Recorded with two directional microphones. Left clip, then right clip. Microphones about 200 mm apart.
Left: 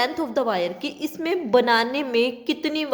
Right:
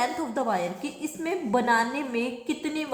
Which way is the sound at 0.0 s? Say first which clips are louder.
Left 4 dB; 45° left (ahead or behind).